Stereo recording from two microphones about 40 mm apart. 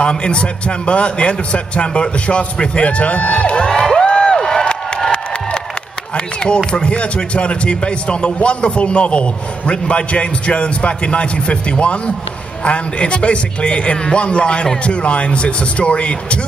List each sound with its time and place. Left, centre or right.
0.0 s speech: left
3.6 s music: centre
6.1 s speech: left